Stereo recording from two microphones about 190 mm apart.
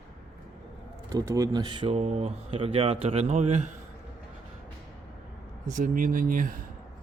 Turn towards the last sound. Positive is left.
turn(degrees=-45)  # may be behind; listen again after turning